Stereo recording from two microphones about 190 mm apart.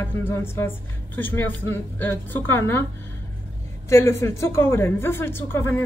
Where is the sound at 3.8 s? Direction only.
15° left (ahead or behind).